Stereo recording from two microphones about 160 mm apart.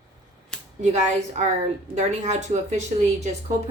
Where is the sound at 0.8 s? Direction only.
50° right (ahead or behind).